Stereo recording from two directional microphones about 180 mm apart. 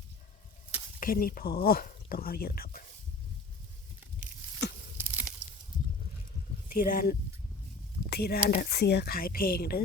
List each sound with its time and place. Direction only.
0.9 s speech: 50° left (ahead or behind)
4.9 s a sound: 5° right (ahead or behind)
6.7 s speech: 50° left (ahead or behind)